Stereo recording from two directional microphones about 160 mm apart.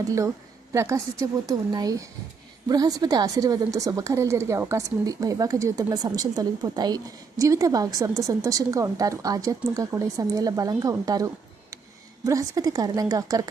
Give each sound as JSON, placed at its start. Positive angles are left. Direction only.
{"t": 0.7, "sound": "a woman's voice", "side_deg": -20}